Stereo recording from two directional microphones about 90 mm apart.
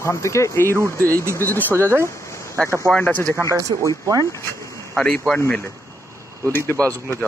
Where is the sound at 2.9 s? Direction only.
15° left (ahead or behind).